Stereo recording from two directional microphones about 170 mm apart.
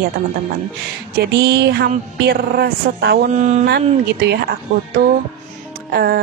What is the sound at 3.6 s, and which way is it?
Speech, 75° right (ahead or behind).